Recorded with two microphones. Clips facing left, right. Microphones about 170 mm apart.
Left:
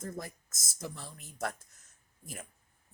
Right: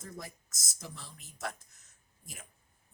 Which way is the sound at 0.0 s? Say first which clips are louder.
Left 5 dB; 50° left (ahead or behind).